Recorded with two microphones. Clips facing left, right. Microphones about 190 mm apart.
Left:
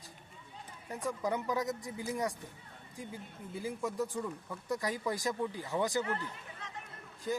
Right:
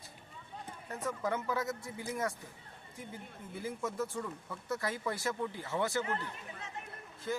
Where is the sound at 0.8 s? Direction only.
15° left (ahead or behind).